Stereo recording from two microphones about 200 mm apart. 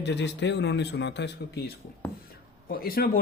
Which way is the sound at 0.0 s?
60° left (ahead or behind).